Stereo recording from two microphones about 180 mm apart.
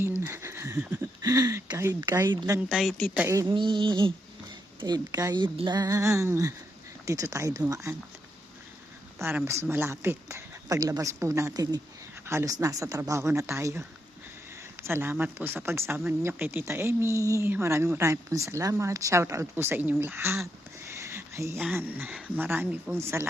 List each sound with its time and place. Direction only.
0.0 s speech: 15° right (ahead or behind)
2.3 s a woman's voice: 25° right (ahead or behind)
2.6 s speech: 5° right (ahead or behind)
3.2 s speech: 15° right (ahead or behind)
3.5 s a woman's voice: 25° right (ahead or behind)
9.1 s speech: 15° right (ahead or behind)
14.8 s speech: 15° right (ahead or behind)
20.8 s a sound: 15° right (ahead or behind)
21.6 s speech: 10° right (ahead or behind)